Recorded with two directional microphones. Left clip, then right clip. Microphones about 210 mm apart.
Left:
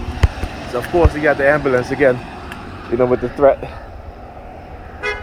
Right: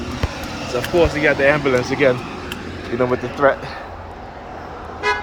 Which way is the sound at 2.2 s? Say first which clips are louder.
Right 2 dB; 15° right (ahead or behind).